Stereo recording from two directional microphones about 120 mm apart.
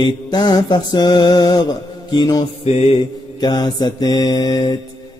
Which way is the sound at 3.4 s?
35° left (ahead or behind).